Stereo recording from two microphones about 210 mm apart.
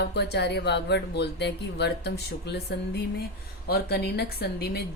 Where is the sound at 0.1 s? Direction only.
50° left (ahead or behind).